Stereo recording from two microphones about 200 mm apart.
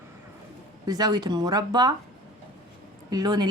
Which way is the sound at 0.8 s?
20° right (ahead or behind).